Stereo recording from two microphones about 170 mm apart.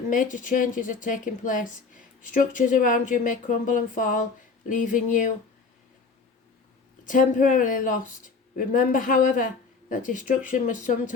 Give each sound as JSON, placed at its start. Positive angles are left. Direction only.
{"t": 0.1, "sound": "speech", "side_deg": 50}
{"t": 7.0, "sound": "speech", "side_deg": 50}